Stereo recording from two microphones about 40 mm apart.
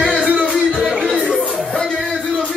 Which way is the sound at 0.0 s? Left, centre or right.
Centre.